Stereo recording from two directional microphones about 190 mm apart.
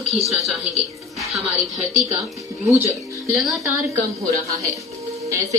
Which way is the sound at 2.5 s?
15° right (ahead or behind).